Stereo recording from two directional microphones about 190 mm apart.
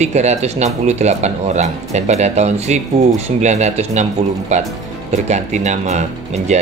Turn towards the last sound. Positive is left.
turn(degrees=-35)  # may be behind; listen again after turning